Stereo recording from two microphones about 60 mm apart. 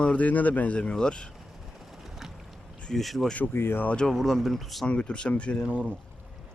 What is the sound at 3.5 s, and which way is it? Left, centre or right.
Speech, left.